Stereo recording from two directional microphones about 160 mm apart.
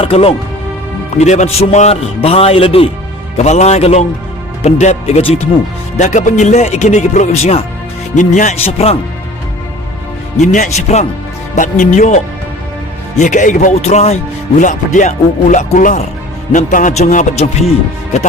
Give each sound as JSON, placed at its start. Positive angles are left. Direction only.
{"t": 0.0, "sound": "a man's voice", "side_deg": 40}
{"t": 10.3, "sound": "speech", "side_deg": 50}